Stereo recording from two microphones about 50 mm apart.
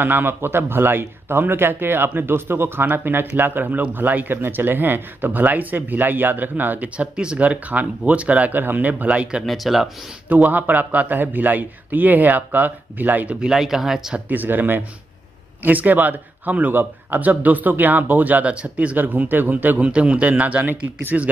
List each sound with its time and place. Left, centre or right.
0.0 s speech: right
9.5 s speech: centre
10.2 s speech: right
13.4 s speech: centre
14.3 s speech: right
18.9 s speech: right
19.9 s speech: right